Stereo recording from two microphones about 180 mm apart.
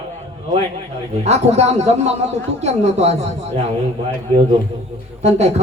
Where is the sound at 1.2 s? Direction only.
35° right (ahead or behind).